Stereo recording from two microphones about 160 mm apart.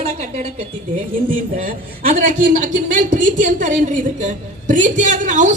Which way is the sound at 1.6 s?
60° right (ahead or behind).